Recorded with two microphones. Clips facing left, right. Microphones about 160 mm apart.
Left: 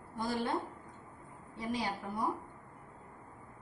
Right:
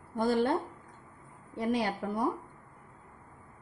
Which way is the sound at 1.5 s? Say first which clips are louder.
Right 7 dB; 60° right (ahead or behind).